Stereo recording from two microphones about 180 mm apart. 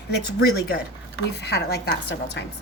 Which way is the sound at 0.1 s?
60° left (ahead or behind).